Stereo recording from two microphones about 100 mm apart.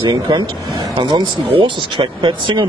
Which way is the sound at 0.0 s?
45° right (ahead or behind).